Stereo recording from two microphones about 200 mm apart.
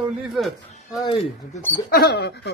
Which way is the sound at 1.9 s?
50° left (ahead or behind).